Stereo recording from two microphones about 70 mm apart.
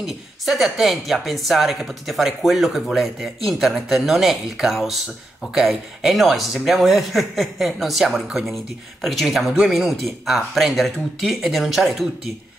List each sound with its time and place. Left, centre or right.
0.0 s speech: centre